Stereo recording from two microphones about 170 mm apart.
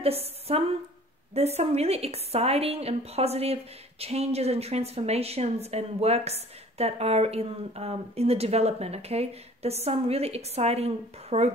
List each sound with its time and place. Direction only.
0.0 s a woman's voice: 35° right (ahead or behind)